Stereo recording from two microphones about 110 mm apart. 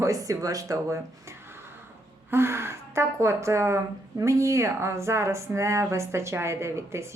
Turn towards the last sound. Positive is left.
turn(degrees=-25)  # may be behind; listen again after turning